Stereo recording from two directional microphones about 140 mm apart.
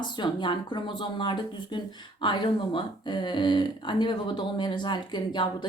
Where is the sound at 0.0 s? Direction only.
35° left (ahead or behind).